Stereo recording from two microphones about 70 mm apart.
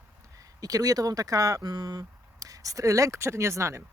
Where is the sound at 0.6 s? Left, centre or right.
Right.